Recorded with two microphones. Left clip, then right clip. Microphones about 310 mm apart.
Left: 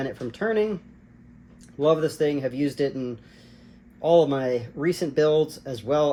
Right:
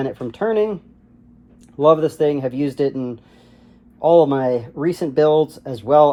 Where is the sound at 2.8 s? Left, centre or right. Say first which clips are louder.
Right 6 dB; right.